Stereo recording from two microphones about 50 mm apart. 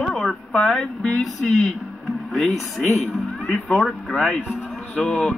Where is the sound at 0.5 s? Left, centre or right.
Centre.